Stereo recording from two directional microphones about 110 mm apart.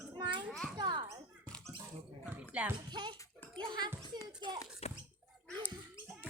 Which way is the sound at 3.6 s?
40° right (ahead or behind).